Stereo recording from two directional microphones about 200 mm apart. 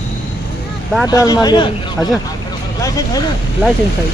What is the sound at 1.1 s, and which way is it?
Speech, 20° left (ahead or behind).